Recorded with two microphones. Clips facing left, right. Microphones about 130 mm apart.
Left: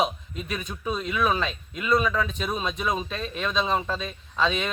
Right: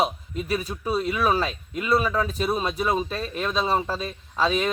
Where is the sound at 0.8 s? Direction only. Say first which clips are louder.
Right 2 dB; 35° right (ahead or behind).